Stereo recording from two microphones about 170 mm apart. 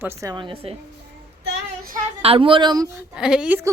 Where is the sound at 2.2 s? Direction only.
35° right (ahead or behind).